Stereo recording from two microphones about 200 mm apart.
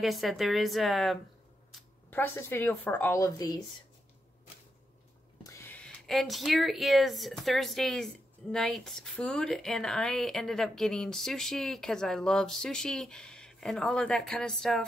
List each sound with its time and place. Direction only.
0.0 s speech: centre (ahead or behind); by 3.5 s 15° left (ahead or behind)
5.4 s speech: 15° left (ahead or behind)